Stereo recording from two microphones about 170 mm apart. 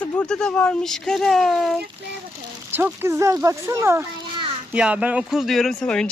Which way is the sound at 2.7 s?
15° right (ahead or behind).